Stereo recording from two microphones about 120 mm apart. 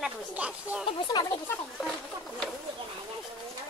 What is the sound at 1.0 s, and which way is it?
Speech, 40° left (ahead or behind).